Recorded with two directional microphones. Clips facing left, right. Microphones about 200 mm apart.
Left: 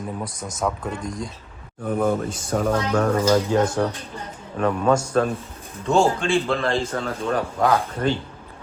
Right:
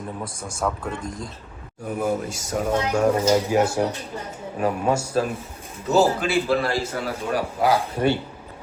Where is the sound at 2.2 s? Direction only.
10° right (ahead or behind).